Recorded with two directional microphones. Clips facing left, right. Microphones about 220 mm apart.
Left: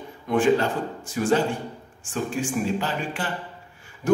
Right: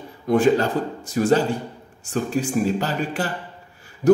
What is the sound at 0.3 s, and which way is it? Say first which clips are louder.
Speech: right 3 dB; 40° right (ahead or behind).